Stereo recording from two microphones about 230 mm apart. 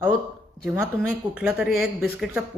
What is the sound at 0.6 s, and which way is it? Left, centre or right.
Speech, centre.